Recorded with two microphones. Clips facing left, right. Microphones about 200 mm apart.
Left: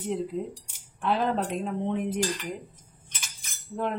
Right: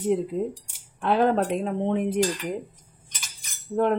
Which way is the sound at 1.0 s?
60° right (ahead or behind).